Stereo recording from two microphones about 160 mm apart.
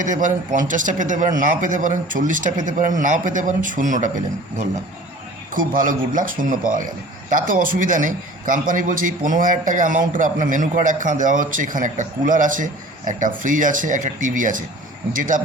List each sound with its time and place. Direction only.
0.0 s speech: 55° right (ahead or behind)
5.5 s a man's voice: 60° right (ahead or behind)